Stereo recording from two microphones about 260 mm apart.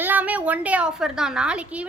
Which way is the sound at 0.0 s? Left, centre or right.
Centre.